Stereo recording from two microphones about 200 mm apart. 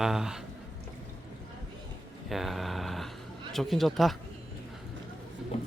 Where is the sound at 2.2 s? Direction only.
Centre (ahead or behind).